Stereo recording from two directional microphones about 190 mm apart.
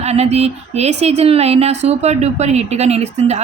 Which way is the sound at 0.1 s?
35° right (ahead or behind).